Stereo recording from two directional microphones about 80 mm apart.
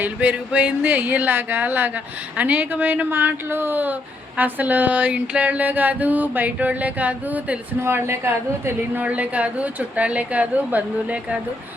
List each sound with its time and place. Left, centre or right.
0.0 s a sound: centre
7.8 s speech: right
9.0 s a woman's voice: centre